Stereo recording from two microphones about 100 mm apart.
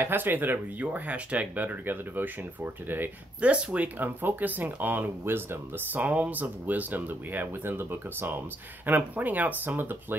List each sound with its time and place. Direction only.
0.0 s speech: 20° right (ahead or behind)